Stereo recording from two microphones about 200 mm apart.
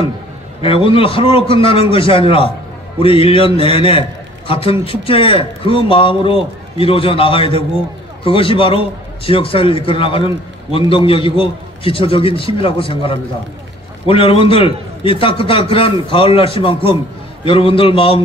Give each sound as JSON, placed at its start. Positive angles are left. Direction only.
{"t": 0.6, "sound": "a man's voice", "side_deg": 25}